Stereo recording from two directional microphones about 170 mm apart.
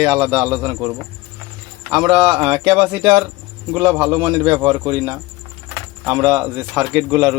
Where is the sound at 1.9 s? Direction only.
5° right (ahead or behind).